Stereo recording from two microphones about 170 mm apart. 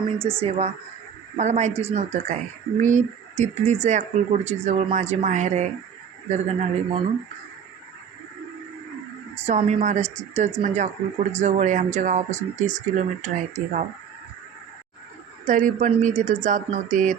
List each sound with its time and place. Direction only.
0.2 s speech: 15° right (ahead or behind)
0.4 s a woman's voice: 40° right (ahead or behind)
9.3 s a woman's voice: 40° right (ahead or behind)
15.4 s speech: 50° right (ahead or behind)